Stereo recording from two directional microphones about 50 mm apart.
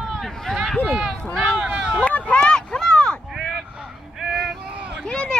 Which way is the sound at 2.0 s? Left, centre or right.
Left.